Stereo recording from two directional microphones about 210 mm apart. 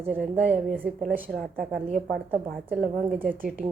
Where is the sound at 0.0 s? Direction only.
10° right (ahead or behind).